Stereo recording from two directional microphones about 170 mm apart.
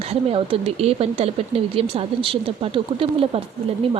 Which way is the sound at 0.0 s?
35° right (ahead or behind).